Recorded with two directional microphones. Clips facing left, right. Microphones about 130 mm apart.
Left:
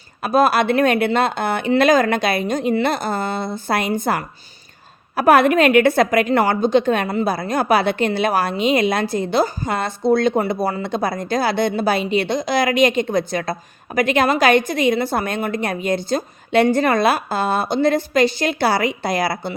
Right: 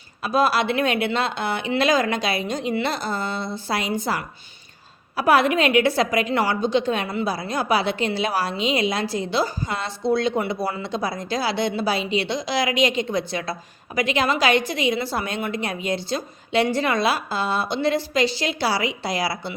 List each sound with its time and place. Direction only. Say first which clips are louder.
0.2 s a woman's voice: left 4 dB; 50° left (ahead or behind)